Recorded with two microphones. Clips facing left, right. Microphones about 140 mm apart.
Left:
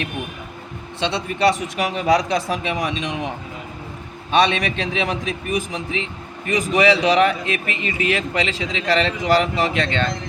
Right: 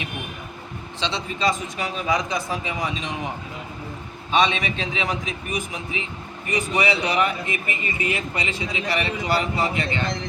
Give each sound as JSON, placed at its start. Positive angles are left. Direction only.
{"t": 0.9, "sound": "speech", "side_deg": 60}
{"t": 4.3, "sound": "a man's voice", "side_deg": 70}
{"t": 5.7, "sound": "speech", "side_deg": 80}